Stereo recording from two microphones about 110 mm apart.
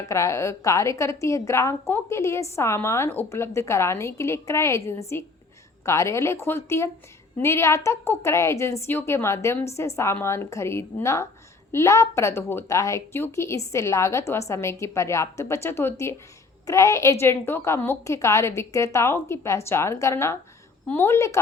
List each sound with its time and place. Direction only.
0.0 s a woman's voice: 25° left (ahead or behind)